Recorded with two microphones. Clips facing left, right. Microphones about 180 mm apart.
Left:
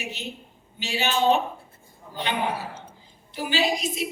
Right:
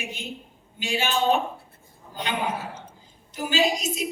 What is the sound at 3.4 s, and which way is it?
Speech, 45° right (ahead or behind).